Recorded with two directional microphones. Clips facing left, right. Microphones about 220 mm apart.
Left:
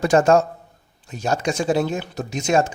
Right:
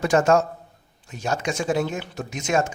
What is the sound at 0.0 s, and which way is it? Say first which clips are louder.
Speech: left 3 dB; 30° left (ahead or behind).